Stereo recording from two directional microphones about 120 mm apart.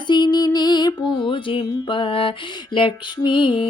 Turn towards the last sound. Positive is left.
turn(degrees=45)  # may be behind; listen again after turning